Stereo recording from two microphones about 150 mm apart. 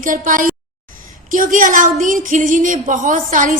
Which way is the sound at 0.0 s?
60° right (ahead or behind).